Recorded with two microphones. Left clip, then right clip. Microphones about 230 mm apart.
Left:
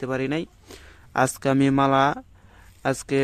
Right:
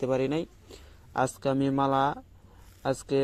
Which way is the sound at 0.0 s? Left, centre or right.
Left.